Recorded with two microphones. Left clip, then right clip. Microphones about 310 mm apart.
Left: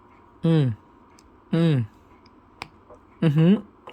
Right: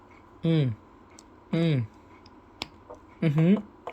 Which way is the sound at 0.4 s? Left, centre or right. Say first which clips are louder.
Left 4 dB; centre.